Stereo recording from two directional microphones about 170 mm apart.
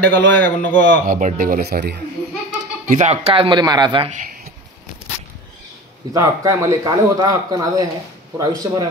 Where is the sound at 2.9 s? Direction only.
40° right (ahead or behind); by 4.1 s 25° right (ahead or behind).